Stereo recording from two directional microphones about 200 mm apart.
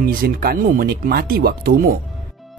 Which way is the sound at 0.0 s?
50° right (ahead or behind).